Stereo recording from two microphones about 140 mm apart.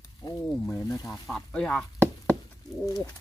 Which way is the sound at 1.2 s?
5° left (ahead or behind).